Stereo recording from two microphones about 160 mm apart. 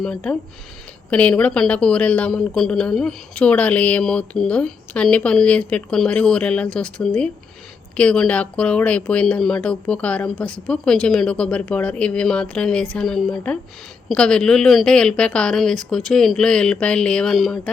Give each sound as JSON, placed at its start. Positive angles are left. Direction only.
{"t": 0.0, "sound": "a woman's voice", "side_deg": 5}